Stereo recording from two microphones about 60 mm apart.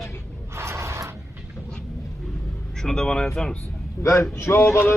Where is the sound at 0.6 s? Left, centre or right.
Right.